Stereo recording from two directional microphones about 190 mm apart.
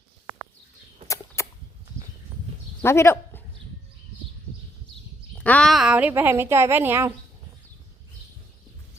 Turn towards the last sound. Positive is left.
turn(degrees=-10)  # may be behind; listen again after turning